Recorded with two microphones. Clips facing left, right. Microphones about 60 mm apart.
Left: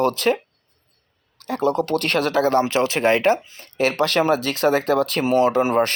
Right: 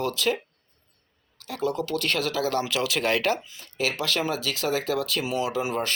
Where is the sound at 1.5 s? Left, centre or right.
Left.